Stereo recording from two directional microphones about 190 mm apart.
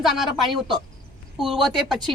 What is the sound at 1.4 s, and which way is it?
Speech, centre (ahead or behind).